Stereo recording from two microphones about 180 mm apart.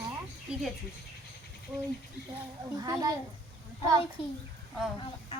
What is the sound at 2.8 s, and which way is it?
Speech, 20° right (ahead or behind).